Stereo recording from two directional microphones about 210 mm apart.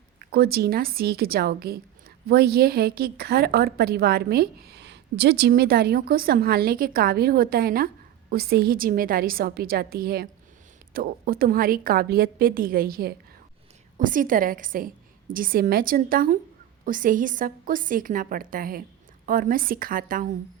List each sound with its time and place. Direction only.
0.2 s a woman's voice: 50° right (ahead or behind)